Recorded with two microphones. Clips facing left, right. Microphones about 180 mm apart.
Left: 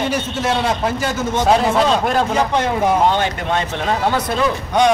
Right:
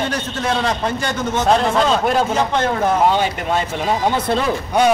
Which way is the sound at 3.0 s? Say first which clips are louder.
Even; 5° right (ahead or behind).